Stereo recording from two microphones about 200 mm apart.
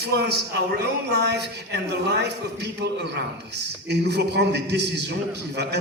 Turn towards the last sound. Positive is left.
turn(degrees=-55)  # may be behind; listen again after turning